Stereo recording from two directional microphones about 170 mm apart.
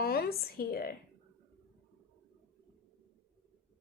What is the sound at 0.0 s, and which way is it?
Speech, 65° left (ahead or behind).